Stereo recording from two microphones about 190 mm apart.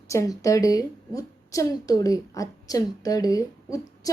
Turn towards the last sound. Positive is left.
turn(degrees=20)  # may be behind; listen again after turning